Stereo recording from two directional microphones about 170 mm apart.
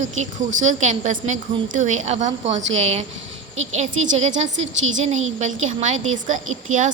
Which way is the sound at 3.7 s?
40° right (ahead or behind).